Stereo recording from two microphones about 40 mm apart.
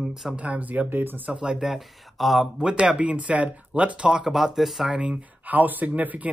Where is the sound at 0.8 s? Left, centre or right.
Right.